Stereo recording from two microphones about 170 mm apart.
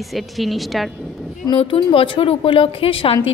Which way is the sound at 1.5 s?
30° left (ahead or behind).